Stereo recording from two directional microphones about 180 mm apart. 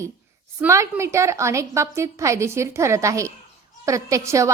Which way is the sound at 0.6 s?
15° right (ahead or behind).